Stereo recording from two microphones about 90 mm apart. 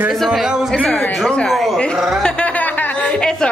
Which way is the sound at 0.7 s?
15° left (ahead or behind).